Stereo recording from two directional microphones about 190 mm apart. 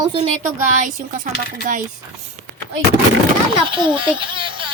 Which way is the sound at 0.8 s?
45° right (ahead or behind).